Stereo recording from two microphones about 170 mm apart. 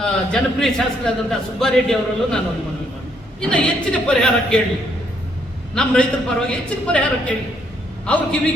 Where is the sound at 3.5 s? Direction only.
5° left (ahead or behind).